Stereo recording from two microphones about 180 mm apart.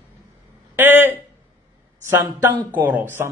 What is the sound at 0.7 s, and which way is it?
Speech, 10° right (ahead or behind).